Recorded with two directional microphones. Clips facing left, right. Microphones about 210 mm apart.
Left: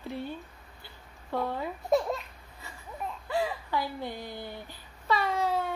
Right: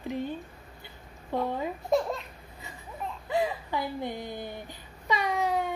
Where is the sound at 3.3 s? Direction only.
20° right (ahead or behind).